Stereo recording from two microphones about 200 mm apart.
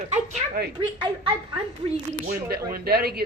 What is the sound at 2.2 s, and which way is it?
Speech, 50° right (ahead or behind).